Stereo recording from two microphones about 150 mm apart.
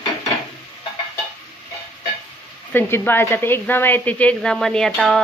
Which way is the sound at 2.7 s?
15° left (ahead or behind).